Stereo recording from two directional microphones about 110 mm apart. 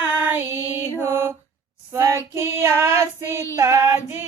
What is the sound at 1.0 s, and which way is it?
Female singing, 20° right (ahead or behind).